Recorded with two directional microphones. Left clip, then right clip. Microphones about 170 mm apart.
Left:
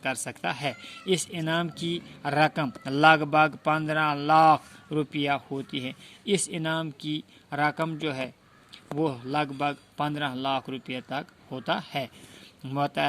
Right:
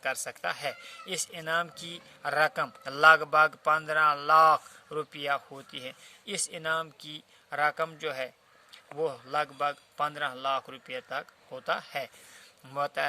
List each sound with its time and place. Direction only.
0.0 s speech: 10° right (ahead or behind)